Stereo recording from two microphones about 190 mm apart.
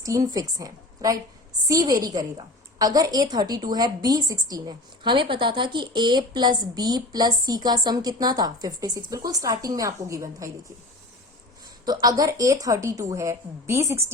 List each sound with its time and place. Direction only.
0.0 s a woman's voice: 15° right (ahead or behind)
11.9 s a woman's voice: 20° right (ahead or behind)